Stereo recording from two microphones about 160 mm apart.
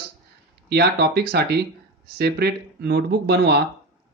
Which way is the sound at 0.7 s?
90° right.